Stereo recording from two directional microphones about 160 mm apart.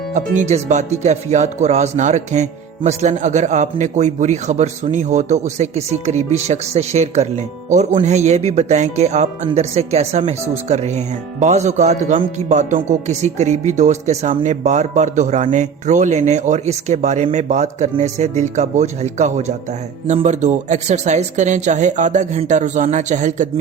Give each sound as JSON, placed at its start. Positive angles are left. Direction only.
{"t": 0.1, "sound": "speech", "side_deg": -50}